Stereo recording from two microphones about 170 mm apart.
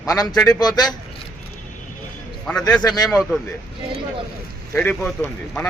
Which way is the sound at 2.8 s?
25° left (ahead or behind).